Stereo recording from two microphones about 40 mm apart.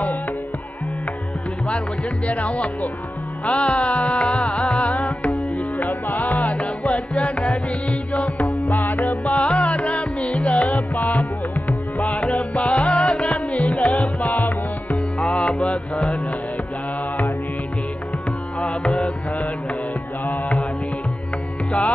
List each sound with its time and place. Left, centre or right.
2.2 s music: left
15.1 s music: left
18.6 s tabla: left
20.2 s music: left